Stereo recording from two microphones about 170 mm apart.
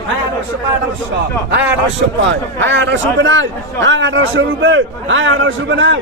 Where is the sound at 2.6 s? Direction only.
90° right.